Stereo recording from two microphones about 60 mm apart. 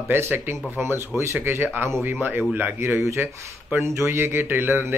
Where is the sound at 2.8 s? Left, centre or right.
Right.